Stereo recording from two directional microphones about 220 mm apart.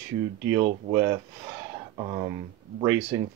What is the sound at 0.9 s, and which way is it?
Speech, 15° right (ahead or behind).